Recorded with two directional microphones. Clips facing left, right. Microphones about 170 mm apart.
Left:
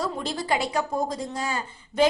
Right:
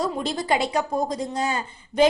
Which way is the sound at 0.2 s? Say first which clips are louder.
Right 3 dB; 20° right (ahead or behind).